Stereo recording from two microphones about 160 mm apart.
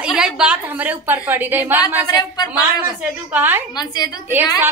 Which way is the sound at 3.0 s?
10° right (ahead or behind).